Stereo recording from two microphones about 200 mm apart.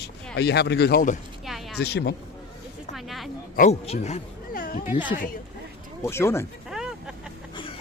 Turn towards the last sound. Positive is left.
turn(degrees=0)  # may be behind; listen again after turning